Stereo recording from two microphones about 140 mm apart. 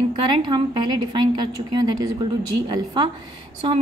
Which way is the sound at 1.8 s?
30° right (ahead or behind).